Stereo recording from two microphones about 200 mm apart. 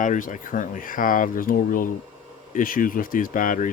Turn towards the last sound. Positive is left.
turn(degrees=40)  # may be behind; listen again after turning